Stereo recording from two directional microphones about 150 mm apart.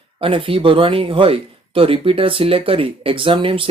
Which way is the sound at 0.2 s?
35° right (ahead or behind).